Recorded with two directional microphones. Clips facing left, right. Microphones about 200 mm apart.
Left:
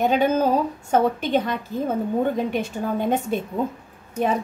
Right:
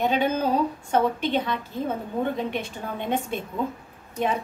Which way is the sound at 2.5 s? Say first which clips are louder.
Left 6 dB; 40° left (ahead or behind).